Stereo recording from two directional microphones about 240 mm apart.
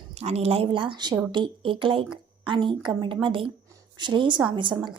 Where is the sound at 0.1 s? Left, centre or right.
Right.